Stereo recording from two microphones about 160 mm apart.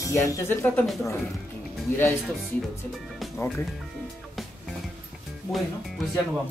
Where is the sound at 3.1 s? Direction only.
5° left (ahead or behind).